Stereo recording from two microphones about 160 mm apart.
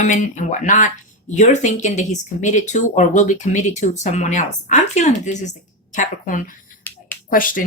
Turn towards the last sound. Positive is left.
turn(degrees=55)  # may be behind; listen again after turning